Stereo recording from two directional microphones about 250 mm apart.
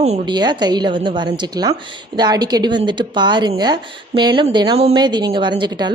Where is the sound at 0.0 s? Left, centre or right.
Right.